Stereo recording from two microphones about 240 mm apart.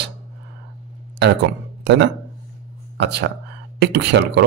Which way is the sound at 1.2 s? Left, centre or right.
Right.